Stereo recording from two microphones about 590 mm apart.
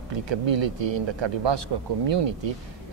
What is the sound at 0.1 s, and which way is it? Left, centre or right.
Speech, right.